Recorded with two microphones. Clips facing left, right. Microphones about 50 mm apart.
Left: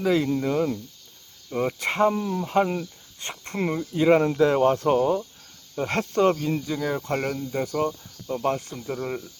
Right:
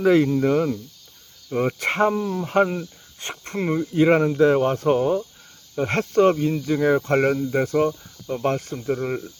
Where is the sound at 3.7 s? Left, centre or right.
Centre.